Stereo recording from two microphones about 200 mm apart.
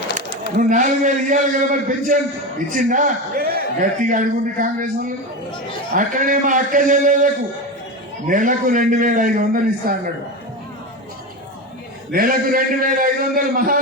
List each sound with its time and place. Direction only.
0.5 s a man's voice: 40° right (ahead or behind)
8.3 s a man's voice: 40° right (ahead or behind)
12.1 s a man's voice: 45° right (ahead or behind)